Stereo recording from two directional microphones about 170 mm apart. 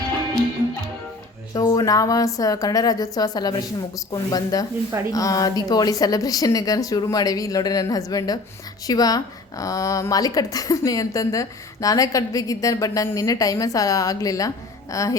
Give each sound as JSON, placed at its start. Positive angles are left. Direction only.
{"t": 1.5, "sound": "a woman's voice", "side_deg": 20}